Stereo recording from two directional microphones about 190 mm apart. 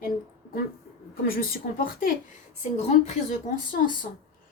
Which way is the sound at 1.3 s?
50° left (ahead or behind).